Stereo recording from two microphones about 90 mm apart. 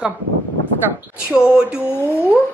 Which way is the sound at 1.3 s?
10° right (ahead or behind).